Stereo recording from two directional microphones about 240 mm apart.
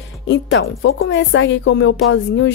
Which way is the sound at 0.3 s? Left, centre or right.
Left.